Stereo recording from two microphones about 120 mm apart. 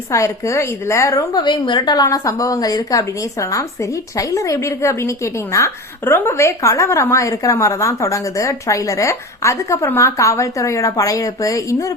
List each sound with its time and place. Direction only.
0.1 s a woman's voice: 25° left (ahead or behind)